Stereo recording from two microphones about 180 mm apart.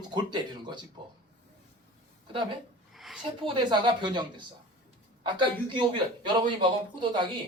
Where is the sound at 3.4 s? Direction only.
25° right (ahead or behind).